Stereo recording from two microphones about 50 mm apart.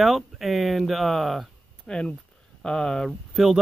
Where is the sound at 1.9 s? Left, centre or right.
Centre.